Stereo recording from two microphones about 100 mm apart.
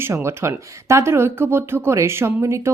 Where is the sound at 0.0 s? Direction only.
25° right (ahead or behind).